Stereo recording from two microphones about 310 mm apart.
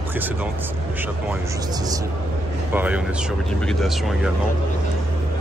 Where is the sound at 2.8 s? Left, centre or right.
Centre.